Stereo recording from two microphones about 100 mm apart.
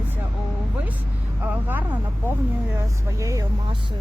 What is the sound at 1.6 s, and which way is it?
Speech, 20° right (ahead or behind).